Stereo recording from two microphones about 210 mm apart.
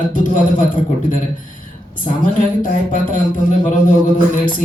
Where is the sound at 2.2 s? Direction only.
40° left (ahead or behind).